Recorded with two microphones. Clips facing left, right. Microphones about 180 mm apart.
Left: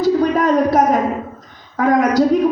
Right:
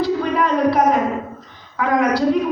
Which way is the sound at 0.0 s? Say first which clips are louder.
Left 4 dB; 45° left (ahead or behind).